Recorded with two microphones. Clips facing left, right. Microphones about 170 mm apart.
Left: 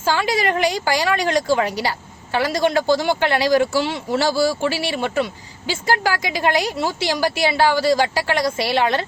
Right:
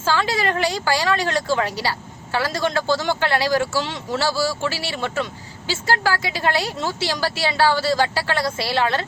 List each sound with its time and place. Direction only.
0.0 s a woman's voice: 15° left (ahead or behind)